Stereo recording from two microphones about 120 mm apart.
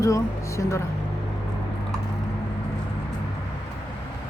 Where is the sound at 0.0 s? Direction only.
25° left (ahead or behind).